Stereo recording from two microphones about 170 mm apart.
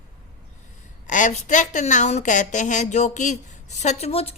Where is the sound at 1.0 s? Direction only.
45° left (ahead or behind).